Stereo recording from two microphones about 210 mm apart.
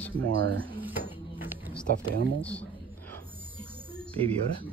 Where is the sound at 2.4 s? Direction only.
5° left (ahead or behind).